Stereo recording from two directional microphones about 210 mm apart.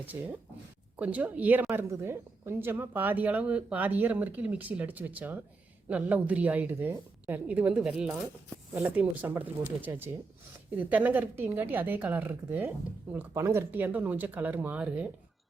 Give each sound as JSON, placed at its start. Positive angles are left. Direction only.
{"t": 0.1, "sound": "a woman's voice", "side_deg": -15}